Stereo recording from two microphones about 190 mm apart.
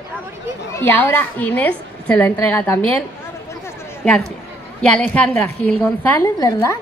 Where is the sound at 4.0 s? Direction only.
5° left (ahead or behind).